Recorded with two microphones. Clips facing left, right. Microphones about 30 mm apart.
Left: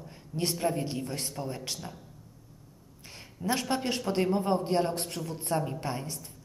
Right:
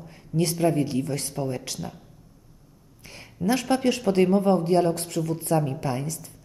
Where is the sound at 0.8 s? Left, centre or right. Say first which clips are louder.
Right 7 dB; right.